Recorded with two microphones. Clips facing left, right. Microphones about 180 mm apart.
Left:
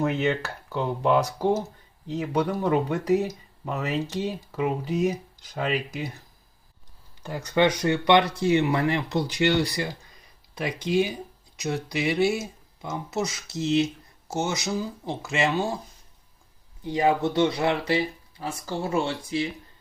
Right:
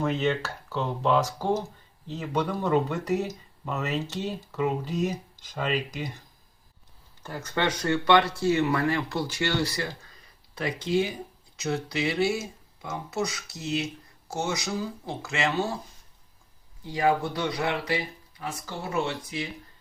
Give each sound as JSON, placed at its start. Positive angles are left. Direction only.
{"t": 0.0, "sound": "speech", "side_deg": 15}
{"t": 4.0, "sound": "speech", "side_deg": 10}
{"t": 7.2, "sound": "speech", "side_deg": 15}
{"t": 16.8, "sound": "speech", "side_deg": 20}